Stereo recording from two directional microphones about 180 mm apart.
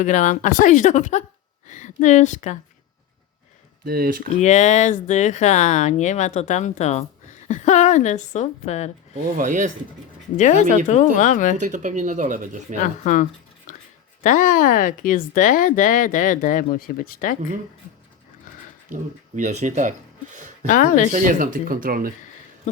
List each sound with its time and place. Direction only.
0.0 s speech: 45° left (ahead or behind)
3.8 s speech: 55° right (ahead or behind)
4.4 s speech: 40° left (ahead or behind)
9.4 s speech: 45° right (ahead or behind)
10.3 s speech: 45° left (ahead or behind)
11.6 s speech: 45° right (ahead or behind)
12.8 s speech: 45° left (ahead or behind)
19.4 s speech: 40° right (ahead or behind)
20.3 s a sound: 45° right (ahead or behind)
20.7 s speech: 45° left (ahead or behind)
21.1 s speech: 45° right (ahead or behind)
22.7 s speech: 40° left (ahead or behind)